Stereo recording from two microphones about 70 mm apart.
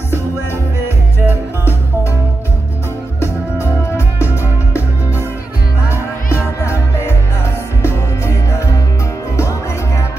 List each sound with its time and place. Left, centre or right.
1.2 s music: right
3.2 s music: left
6.4 s music: left